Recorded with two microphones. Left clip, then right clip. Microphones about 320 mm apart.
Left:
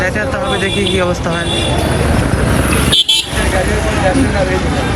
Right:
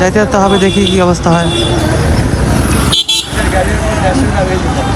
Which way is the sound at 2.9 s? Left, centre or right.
Centre.